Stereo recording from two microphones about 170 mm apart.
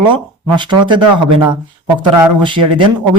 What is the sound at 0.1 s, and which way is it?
Speech, 25° right (ahead or behind).